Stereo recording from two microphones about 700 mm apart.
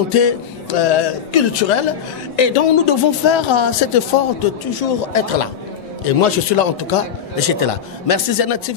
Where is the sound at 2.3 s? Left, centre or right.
Left.